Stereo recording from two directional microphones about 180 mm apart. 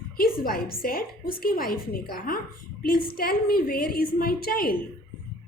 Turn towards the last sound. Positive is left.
turn(degrees=55)  # may be behind; listen again after turning